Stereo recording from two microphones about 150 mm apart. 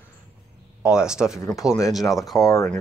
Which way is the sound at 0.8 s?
5° right (ahead or behind).